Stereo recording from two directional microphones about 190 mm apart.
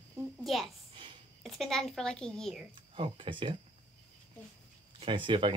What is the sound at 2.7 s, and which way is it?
Speech, 25° right (ahead or behind).